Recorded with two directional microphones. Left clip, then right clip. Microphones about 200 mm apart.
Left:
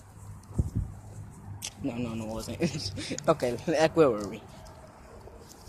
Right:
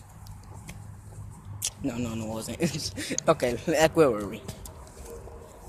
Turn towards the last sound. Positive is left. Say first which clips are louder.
# right 1 dB
turn(degrees=0)  # may be behind; listen again after turning